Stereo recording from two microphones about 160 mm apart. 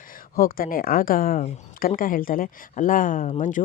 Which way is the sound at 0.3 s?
65° left (ahead or behind).